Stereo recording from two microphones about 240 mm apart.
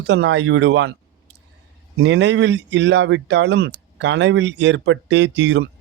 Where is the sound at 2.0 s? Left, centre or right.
Right.